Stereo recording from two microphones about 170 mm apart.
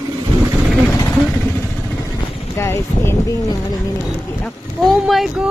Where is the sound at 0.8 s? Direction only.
15° left (ahead or behind).